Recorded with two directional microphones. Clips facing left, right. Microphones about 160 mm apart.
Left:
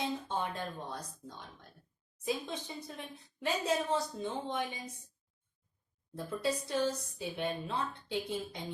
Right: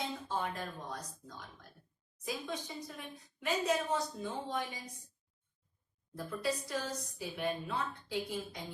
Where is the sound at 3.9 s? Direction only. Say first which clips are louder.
Left 2 dB; 25° left (ahead or behind).